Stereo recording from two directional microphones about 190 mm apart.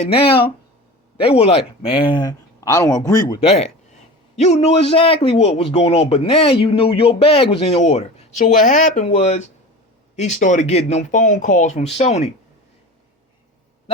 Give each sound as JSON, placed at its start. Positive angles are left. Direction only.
{"t": 0.0, "sound": "speech", "side_deg": 30}
{"t": 3.2, "sound": "a man's voice", "side_deg": 35}